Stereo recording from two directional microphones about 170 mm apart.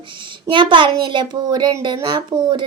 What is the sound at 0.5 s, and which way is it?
A woman's voice, 30° right (ahead or behind).